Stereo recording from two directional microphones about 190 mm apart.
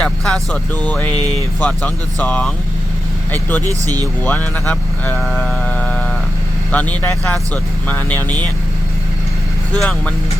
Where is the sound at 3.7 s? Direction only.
20° right (ahead or behind).